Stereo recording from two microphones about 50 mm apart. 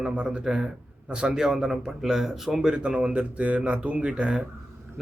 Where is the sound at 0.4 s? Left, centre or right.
Centre.